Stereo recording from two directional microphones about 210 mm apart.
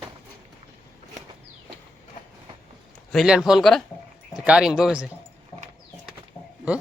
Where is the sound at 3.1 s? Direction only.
Centre (ahead or behind).